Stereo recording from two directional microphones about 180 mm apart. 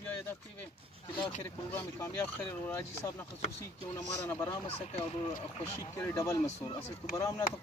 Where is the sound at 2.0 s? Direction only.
15° left (ahead or behind).